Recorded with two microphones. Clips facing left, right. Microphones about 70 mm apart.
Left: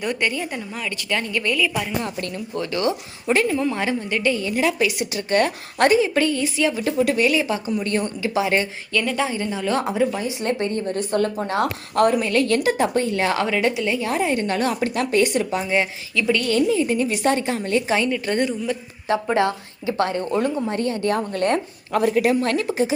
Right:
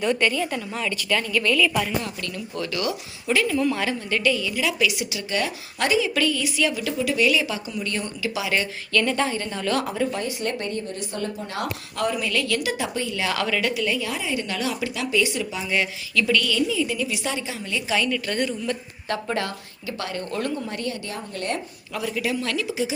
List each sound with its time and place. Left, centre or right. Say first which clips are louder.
0.0 s speech: right 2 dB; centre
2.0 s speech: left 3 dB; left
6.1 s a woman's voice: left 3 dB; left
7.0 s speech: left 2 dB; left
9.0 s a woman's voice: left 2 dB; centre
9.3 s a woman's voice: left 2 dB; centre
10.4 s a woman's voice: left 4 dB; left
10.8 s a woman's voice: left 8 dB; left
14.1 s speech: left 6 dB; left
15.7 s a woman's voice: left 2 dB; left
16.5 s a woman's voice: left 5 dB; left
17.9 s a woman's voice: left 3 dB; left